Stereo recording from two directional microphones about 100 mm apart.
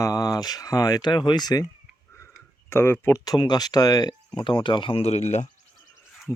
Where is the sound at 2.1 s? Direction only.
25° left (ahead or behind).